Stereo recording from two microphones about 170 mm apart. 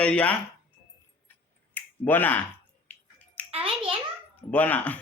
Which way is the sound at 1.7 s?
10° left (ahead or behind).